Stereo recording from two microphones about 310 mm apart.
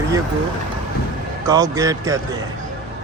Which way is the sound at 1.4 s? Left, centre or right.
Centre.